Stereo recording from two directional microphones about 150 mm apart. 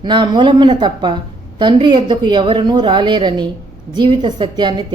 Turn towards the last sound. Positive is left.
turn(degrees=-30)  # may be behind; listen again after turning